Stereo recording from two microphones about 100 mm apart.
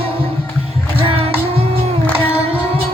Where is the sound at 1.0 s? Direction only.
70° right (ahead or behind).